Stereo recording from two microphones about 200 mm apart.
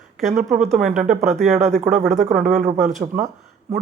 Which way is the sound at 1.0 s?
40° right (ahead or behind).